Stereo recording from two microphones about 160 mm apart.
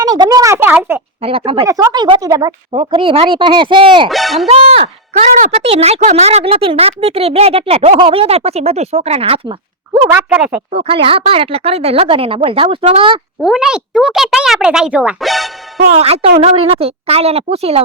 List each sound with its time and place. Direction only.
0.0 s speech: 25° right (ahead or behind)
1.2 s speech: 35° right (ahead or behind)
1.6 s speech: 20° right (ahead or behind)
4.1 s speech: centre (ahead or behind)
4.4 s speech: 40° right (ahead or behind)
10.7 s speech: 35° right (ahead or behind)
13.4 s speech: 5° right (ahead or behind)
15.9 s speech: 40° right (ahead or behind)